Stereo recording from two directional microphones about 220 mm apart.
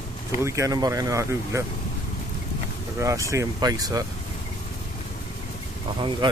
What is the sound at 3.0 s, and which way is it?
Speech, 15° right (ahead or behind).